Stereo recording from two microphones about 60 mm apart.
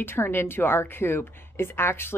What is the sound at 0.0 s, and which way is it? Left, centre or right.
A woman's voice, left.